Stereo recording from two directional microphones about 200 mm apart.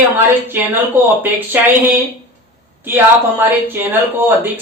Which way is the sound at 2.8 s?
10° right (ahead or behind).